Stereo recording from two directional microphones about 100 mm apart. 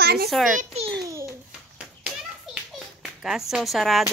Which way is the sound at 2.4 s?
5° right (ahead or behind).